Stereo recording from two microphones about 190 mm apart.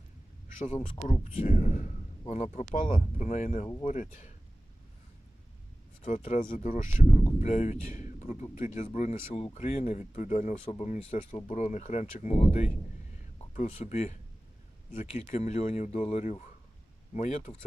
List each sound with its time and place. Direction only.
0.6 s speech: 35° left (ahead or behind)
6.0 s speech: 40° left (ahead or behind)